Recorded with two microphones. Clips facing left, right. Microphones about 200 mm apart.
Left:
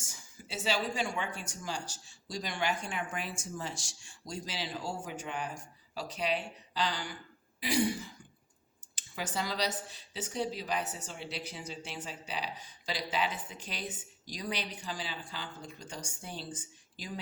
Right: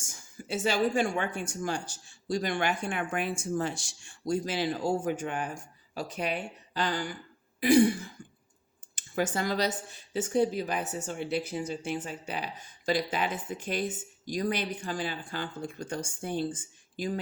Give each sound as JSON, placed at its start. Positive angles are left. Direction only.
{"t": 0.0, "sound": "speech", "side_deg": -50}